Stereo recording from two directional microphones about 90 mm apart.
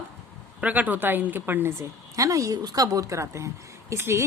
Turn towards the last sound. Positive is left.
turn(degrees=-30)  # may be behind; listen again after turning